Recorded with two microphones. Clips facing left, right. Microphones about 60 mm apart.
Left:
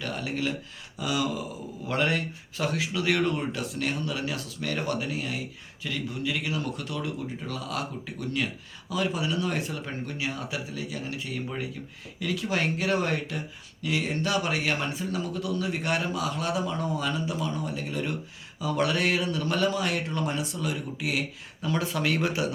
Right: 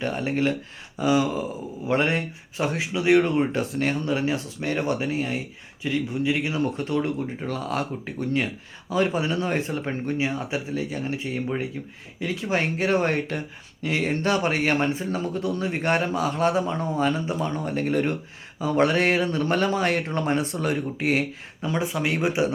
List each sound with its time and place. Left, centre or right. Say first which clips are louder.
0.0 s speech: right 6 dB; right
21.6 s speech: right 2 dB; right